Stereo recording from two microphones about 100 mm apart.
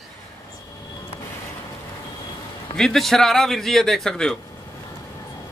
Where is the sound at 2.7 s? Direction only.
5° left (ahead or behind).